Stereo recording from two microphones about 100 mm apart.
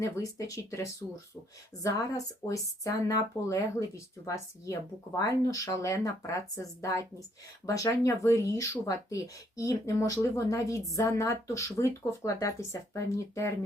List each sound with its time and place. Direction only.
0.0 s speech: 35° left (ahead or behind)